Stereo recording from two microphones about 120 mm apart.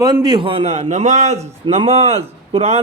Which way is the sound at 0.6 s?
70° right (ahead or behind).